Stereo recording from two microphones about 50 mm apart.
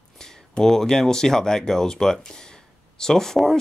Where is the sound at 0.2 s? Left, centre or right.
Centre.